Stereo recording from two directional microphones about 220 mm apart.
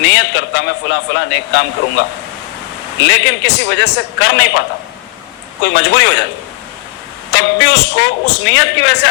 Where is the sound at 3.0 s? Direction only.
55° left (ahead or behind).